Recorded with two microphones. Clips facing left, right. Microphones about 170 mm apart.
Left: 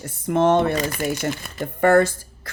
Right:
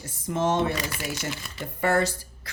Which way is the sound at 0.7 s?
50° left (ahead or behind).